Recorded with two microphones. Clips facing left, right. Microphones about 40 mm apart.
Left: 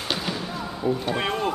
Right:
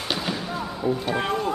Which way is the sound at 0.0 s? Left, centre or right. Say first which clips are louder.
Right 1 dB; centre.